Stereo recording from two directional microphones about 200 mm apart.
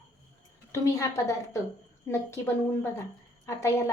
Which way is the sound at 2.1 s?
10° left (ahead or behind).